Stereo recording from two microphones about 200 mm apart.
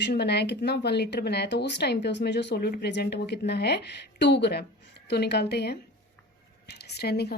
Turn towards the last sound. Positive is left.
turn(degrees=55)  # may be behind; listen again after turning